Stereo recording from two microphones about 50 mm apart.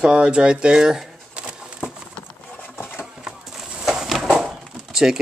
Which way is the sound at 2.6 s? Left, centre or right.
Left.